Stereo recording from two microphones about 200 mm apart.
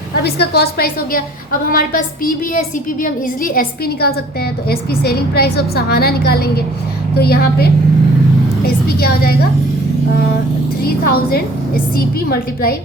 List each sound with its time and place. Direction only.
0.2 s a woman's voice: 55° left (ahead or behind)
10.8 s a woman's voice: 50° left (ahead or behind)